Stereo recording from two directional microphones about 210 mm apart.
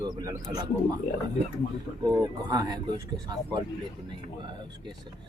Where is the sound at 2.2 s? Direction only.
20° right (ahead or behind).